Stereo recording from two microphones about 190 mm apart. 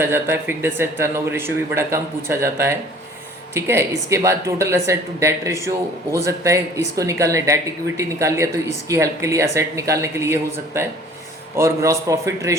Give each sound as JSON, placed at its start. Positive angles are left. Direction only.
{"t": 0.0, "sound": "speech", "side_deg": -10}